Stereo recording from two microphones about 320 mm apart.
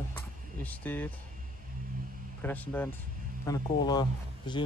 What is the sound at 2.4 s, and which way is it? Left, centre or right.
Speech, centre.